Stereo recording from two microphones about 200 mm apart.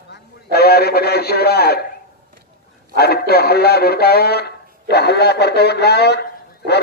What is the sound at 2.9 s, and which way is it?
A man's voice, 50° left (ahead or behind).